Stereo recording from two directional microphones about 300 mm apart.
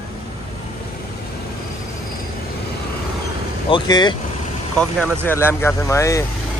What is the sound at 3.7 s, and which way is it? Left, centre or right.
Speech, centre.